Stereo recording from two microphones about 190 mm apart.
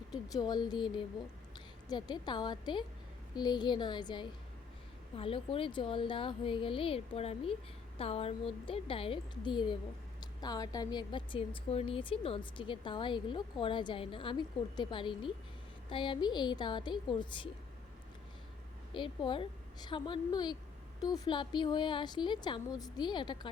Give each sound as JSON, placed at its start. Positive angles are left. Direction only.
{"t": 0.3, "sound": "a woman's voice", "side_deg": 20}
{"t": 18.9, "sound": "a woman's voice", "side_deg": 25}